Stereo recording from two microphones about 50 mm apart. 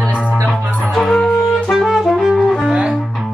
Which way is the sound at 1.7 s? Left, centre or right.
Centre.